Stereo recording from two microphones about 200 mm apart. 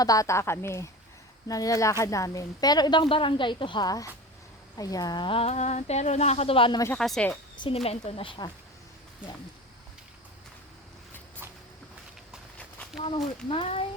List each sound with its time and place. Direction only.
0.0 s a woman's voice: 15° left (ahead or behind)
6.8 s speech: 5° left (ahead or behind)
7.5 s a sound: 25° left (ahead or behind)
7.9 s a woman's voice: 30° left (ahead or behind)
9.2 s speech: 5° right (ahead or behind)
12.5 s a sound: 5° left (ahead or behind)
13.0 s a woman's voice: 25° left (ahead or behind)